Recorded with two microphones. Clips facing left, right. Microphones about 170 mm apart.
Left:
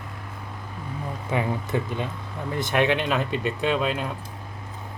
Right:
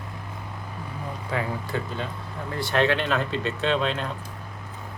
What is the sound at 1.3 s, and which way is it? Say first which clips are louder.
Speech: left 3 dB; 20° left (ahead or behind).